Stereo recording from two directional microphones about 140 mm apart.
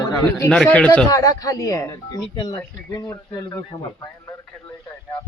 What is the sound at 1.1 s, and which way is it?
Speech, 25° left (ahead or behind).